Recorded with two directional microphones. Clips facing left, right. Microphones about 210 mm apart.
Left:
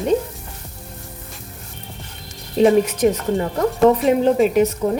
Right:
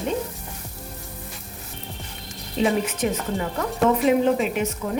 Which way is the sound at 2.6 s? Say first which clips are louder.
Left 8 dB; 40° left (ahead or behind).